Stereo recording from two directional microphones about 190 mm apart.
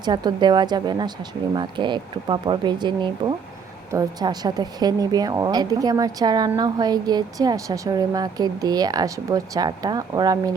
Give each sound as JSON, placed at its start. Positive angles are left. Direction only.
{"t": 0.0, "sound": "speech", "side_deg": -25}